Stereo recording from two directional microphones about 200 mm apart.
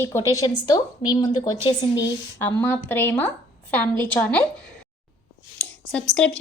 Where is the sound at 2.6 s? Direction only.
10° left (ahead or behind).